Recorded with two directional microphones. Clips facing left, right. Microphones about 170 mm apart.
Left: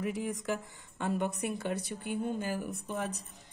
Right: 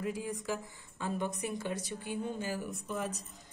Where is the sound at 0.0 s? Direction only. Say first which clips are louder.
Left 2 dB; 90° left.